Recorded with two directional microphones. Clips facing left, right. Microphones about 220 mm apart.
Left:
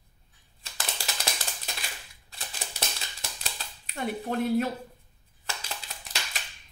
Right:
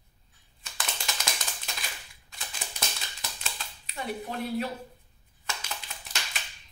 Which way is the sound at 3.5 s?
50° left (ahead or behind).